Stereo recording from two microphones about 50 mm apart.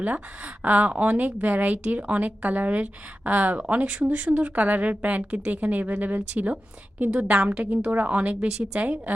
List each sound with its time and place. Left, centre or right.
0.0 s a woman's voice: right